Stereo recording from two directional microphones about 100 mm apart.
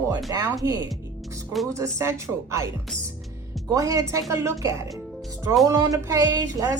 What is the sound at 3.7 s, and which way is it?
A woman's voice, 35° right (ahead or behind).